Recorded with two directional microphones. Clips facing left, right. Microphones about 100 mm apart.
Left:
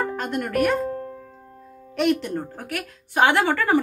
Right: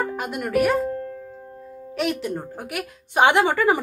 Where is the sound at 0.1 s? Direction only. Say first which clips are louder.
Right 1 dB; 5° right (ahead or behind).